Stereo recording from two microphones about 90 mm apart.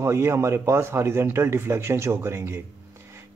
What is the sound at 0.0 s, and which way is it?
A man's voice, 30° right (ahead or behind).